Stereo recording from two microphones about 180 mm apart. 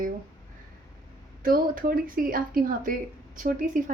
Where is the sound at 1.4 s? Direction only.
50° right (ahead or behind).